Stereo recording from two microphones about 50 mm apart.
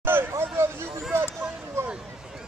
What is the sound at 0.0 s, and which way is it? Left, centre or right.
Vehicle, right.